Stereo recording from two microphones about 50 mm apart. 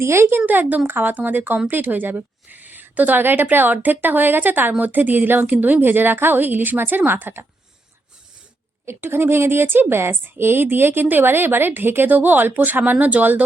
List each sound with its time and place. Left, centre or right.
0.0 s speech: right
0.3 s a woman's voice: right
9.0 s a woman's voice: right